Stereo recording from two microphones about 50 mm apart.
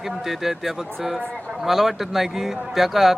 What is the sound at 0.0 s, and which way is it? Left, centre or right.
A man's voice, centre.